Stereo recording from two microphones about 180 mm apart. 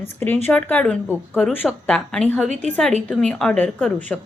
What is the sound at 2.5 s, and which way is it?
Speech, 40° right (ahead or behind).